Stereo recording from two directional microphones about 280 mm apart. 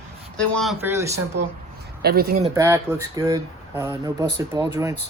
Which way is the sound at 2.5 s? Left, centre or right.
Centre.